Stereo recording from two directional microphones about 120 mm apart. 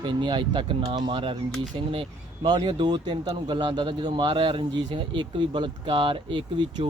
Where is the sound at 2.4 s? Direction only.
40° right (ahead or behind).